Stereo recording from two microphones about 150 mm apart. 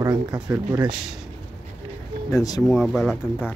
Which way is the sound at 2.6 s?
Centre (ahead or behind).